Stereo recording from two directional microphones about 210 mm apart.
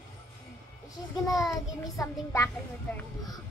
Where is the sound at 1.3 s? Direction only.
15° left (ahead or behind).